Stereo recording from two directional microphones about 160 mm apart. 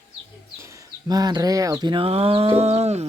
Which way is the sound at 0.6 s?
20° right (ahead or behind).